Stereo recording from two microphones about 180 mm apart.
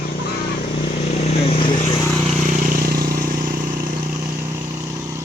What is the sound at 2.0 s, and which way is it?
Vehicle, 5° left (ahead or behind).